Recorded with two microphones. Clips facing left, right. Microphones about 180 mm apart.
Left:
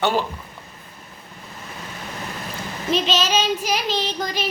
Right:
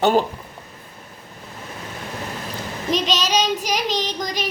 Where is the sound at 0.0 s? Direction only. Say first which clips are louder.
Right 4 dB; 45° right (ahead or behind).